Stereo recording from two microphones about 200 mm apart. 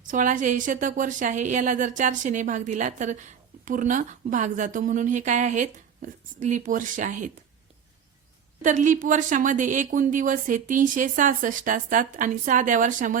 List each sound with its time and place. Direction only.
0.1 s a woman's voice: 40° right (ahead or behind)
8.6 s a woman's voice: 40° right (ahead or behind)